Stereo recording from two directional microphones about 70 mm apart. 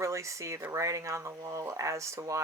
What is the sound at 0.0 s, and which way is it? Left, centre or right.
Speech, right.